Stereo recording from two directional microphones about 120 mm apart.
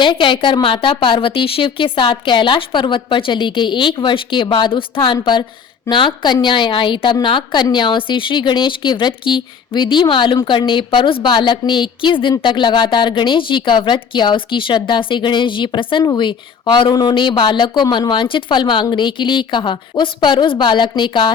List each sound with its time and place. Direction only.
0.0 s a woman's voice: 40° left (ahead or behind)